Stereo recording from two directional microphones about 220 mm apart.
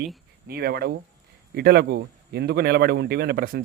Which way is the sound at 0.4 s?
45° right (ahead or behind).